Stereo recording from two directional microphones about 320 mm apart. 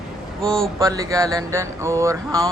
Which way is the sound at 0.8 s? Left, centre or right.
Centre.